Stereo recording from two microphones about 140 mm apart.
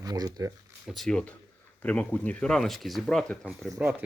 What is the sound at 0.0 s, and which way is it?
Speech, 25° right (ahead or behind).